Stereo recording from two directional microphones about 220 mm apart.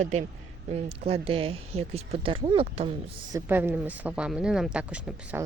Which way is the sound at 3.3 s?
10° right (ahead or behind).